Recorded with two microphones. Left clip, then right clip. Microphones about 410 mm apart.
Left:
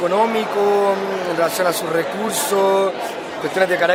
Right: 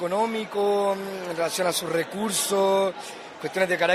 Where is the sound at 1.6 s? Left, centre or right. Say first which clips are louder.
Left 7 dB; right.